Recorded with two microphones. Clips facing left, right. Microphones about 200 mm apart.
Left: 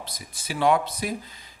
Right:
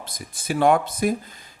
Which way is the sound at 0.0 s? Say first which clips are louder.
Right 3 dB; 50° right (ahead or behind).